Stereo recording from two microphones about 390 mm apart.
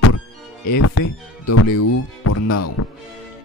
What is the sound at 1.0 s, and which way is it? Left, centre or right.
Speech, left.